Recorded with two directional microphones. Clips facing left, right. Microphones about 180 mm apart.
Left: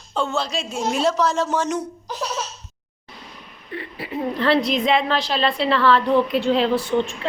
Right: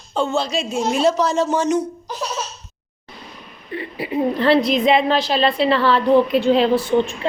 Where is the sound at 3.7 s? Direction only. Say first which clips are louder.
Right 5 dB; 10° right (ahead or behind).